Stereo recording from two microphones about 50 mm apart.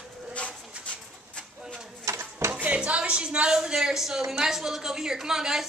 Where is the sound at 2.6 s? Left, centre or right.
Right; by 4.2 s centre.